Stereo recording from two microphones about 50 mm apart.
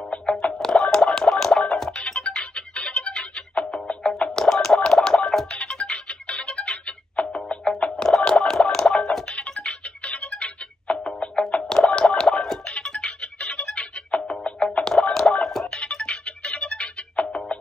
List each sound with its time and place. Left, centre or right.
0.0 s music: centre
4.3 s music: centre
5.5 s music: centre
15.8 s music: left